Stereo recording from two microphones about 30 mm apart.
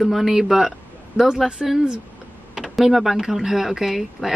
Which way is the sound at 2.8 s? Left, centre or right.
Centre.